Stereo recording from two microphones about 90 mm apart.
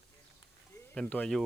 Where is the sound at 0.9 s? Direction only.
15° left (ahead or behind).